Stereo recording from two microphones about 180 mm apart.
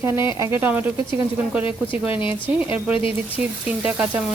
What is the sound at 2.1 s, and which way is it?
Speech, 30° left (ahead or behind).